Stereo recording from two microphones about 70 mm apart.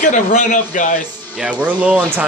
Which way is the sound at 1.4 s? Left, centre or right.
Centre.